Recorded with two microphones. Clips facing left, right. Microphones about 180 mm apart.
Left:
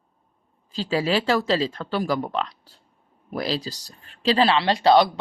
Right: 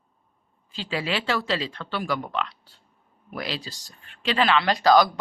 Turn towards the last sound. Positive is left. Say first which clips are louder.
# left 1 dB
turn(degrees=30)  # may be behind; listen again after turning